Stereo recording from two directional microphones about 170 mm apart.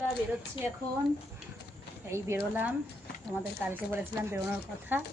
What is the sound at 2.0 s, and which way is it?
Speech, 15° right (ahead or behind).